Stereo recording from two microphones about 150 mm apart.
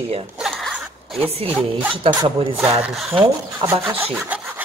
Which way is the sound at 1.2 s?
35° right (ahead or behind).